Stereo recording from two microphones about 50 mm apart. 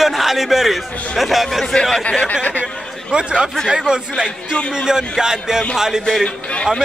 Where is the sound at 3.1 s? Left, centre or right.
Centre.